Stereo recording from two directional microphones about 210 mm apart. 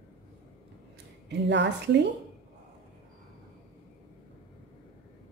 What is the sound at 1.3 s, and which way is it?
Speech, 55° right (ahead or behind).